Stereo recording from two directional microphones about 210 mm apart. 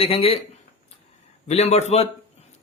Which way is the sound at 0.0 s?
25° left (ahead or behind).